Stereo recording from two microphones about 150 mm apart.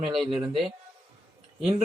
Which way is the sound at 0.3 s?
35° right (ahead or behind).